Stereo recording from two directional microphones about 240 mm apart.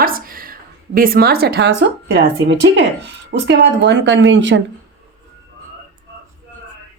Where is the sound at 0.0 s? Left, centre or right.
Right.